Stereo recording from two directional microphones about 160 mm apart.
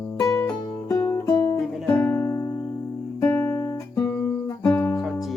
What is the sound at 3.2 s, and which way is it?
Guitar, 10° left (ahead or behind).